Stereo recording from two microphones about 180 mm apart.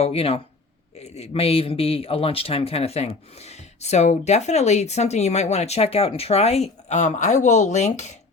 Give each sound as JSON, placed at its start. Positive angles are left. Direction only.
{"t": 0.0, "sound": "speech", "side_deg": 35}